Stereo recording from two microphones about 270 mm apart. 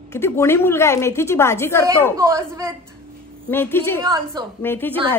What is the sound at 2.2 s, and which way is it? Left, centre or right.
Speech, centre.